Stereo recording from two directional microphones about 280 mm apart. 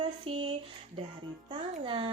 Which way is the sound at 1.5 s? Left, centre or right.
Centre.